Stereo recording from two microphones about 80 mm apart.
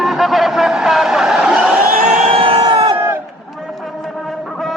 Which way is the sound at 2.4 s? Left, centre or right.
Right.